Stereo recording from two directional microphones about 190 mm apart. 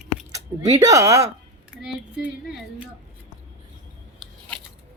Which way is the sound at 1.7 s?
5° right (ahead or behind).